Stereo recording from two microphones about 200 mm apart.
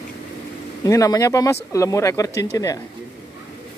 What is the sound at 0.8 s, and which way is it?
Speech, 15° left (ahead or behind).